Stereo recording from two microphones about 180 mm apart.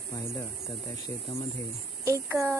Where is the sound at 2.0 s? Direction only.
15° right (ahead or behind).